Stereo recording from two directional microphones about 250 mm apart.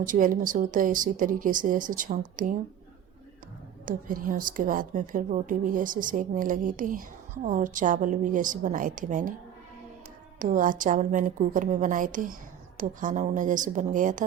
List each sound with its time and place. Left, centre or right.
0.0 s a woman's voice: right
3.8 s a woman's voice: right
10.4 s a woman's voice: right